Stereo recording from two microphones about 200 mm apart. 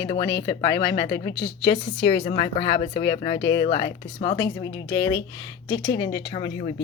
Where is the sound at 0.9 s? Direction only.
55° left (ahead or behind).